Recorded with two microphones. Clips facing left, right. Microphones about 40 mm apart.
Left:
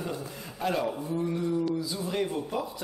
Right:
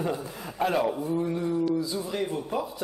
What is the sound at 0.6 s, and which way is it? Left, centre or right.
Speech, centre.